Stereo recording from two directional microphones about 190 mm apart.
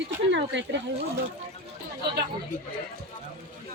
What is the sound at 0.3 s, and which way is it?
Speech, 70° right (ahead or behind).